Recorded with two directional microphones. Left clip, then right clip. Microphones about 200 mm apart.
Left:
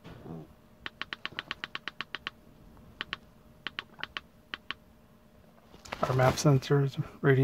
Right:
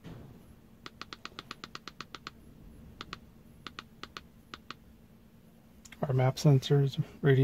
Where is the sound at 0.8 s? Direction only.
30° right (ahead or behind).